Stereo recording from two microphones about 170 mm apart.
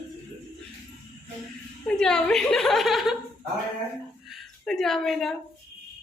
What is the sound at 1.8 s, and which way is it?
A woman's voice, 5° left (ahead or behind).